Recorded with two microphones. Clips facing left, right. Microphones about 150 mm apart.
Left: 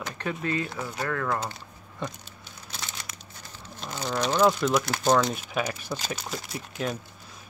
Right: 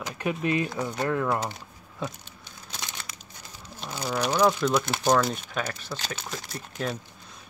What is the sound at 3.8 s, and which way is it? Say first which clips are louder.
Speech: even; 5° right (ahead or behind).